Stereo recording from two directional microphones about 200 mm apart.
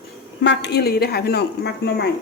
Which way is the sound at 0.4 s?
55° left (ahead or behind).